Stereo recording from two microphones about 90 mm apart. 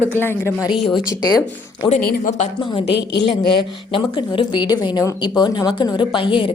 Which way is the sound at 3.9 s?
75° left (ahead or behind).